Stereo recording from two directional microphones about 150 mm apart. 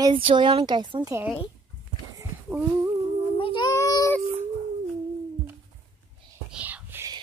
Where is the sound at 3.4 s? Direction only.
35° left (ahead or behind).